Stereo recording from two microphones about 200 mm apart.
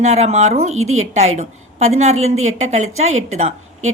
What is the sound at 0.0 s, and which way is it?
Speech, 30° right (ahead or behind).